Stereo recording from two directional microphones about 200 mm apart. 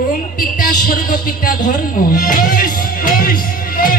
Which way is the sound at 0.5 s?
40° left (ahead or behind).